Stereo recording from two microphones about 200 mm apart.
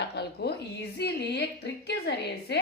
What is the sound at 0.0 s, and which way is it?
A woman's voice, 55° left (ahead or behind).